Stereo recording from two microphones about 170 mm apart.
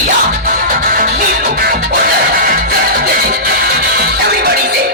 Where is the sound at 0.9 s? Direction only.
55° right (ahead or behind).